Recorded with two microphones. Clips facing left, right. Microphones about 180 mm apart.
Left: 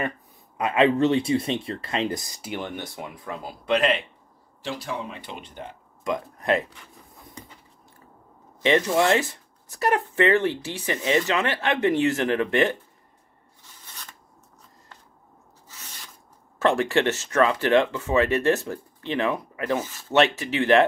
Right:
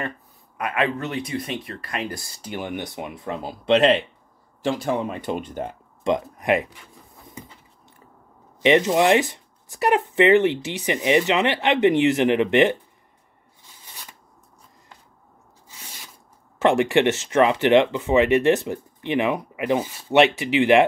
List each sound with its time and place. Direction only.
0.6 s speech: 25° left (ahead or behind)
2.6 s speech: 15° right (ahead or behind)
4.6 s speech: 50° right (ahead or behind)
6.0 s speech: 20° right (ahead or behind)
8.6 s speech: 20° right (ahead or behind)
16.5 s speech: 20° right (ahead or behind)